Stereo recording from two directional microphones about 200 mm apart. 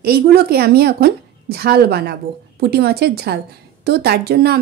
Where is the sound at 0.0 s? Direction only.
50° right (ahead or behind).